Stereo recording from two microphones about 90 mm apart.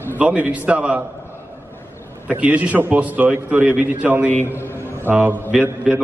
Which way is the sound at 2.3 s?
15° right (ahead or behind).